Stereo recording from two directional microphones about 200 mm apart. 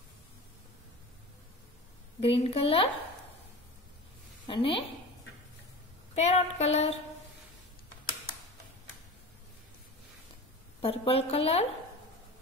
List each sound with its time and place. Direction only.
2.1 s speech: 30° left (ahead or behind)
4.5 s speech: 25° left (ahead or behind)
6.1 s a sound: 35° left (ahead or behind)
10.8 s speech: 30° left (ahead or behind)